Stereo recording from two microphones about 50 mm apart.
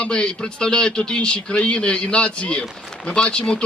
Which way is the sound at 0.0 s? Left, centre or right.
Centre.